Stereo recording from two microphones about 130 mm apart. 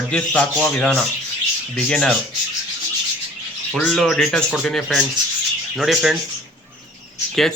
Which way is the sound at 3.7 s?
5° left (ahead or behind).